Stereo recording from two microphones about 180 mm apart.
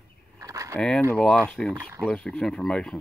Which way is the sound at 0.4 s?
20° right (ahead or behind).